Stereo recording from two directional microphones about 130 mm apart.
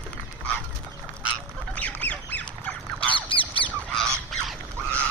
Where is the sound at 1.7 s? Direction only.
10° left (ahead or behind).